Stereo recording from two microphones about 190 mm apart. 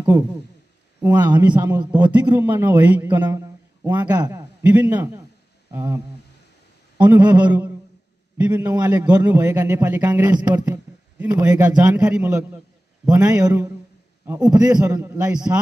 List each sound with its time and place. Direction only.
1.0 s a man's voice: 10° right (ahead or behind)